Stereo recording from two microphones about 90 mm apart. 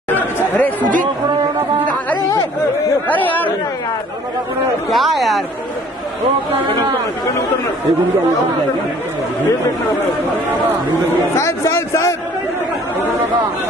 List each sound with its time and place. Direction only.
0.1 s chatter: 15° left (ahead or behind)
3.1 s chatter: 20° left (ahead or behind)
4.9 s speech: centre (ahead or behind)
11.3 s a sound: 30° left (ahead or behind)